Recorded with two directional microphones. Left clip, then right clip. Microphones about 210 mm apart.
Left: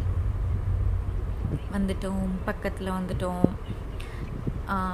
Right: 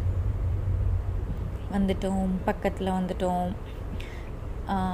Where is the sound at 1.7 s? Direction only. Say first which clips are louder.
Right 4 dB; centre (ahead or behind).